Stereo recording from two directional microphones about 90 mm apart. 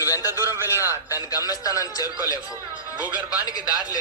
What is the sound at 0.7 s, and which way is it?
A man's voice, 35° left (ahead or behind).